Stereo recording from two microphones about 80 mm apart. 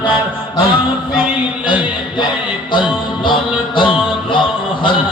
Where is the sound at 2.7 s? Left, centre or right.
Left.